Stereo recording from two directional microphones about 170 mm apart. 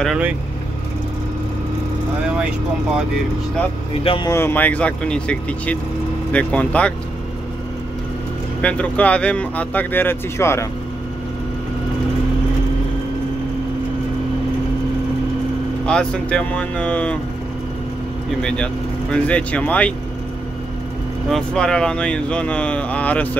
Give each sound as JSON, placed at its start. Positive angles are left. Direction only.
{"t": 0.0, "sound": "speech", "side_deg": -5}
{"t": 4.0, "sound": "speech", "side_deg": 30}
{"t": 4.3, "sound": "speech", "side_deg": 15}
{"t": 8.5, "sound": "speech", "side_deg": 5}
{"t": 15.8, "sound": "speech", "side_deg": 5}
{"t": 18.4, "sound": "speech", "side_deg": 5}
{"t": 21.3, "sound": "speech", "side_deg": 5}